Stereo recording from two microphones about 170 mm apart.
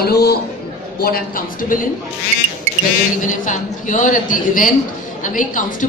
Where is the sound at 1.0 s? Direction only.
55° left (ahead or behind).